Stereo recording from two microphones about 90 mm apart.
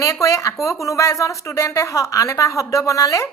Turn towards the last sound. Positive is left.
turn(degrees=35)  # may be behind; listen again after turning